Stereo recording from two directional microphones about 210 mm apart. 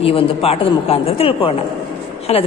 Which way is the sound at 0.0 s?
25° left (ahead or behind).